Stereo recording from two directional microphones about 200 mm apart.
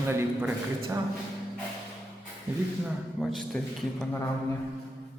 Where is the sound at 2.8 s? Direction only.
Centre (ahead or behind).